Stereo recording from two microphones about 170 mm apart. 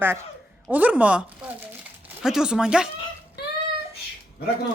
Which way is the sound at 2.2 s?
5° right (ahead or behind).